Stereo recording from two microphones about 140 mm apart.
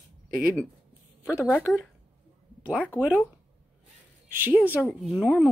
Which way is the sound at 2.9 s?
10° right (ahead or behind).